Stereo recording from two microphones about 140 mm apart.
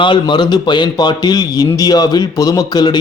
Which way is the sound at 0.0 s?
35° left (ahead or behind).